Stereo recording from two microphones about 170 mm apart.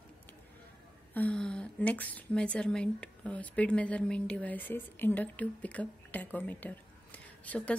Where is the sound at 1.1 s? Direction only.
5° left (ahead or behind).